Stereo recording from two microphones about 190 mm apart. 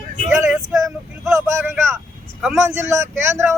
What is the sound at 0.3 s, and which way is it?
Vehicle, 15° right (ahead or behind).